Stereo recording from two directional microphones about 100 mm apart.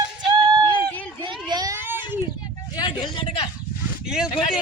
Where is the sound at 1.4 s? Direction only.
45° right (ahead or behind).